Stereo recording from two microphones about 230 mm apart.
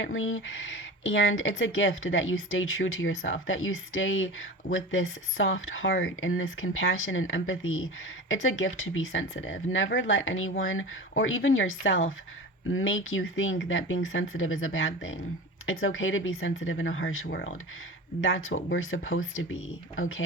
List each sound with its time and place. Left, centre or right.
0.0 s speech: left